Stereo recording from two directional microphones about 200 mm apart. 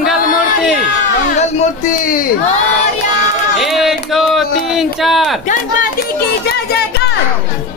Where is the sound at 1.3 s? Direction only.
40° left (ahead or behind).